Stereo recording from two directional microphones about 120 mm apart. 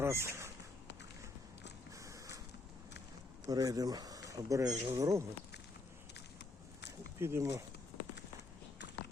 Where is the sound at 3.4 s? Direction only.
30° right (ahead or behind).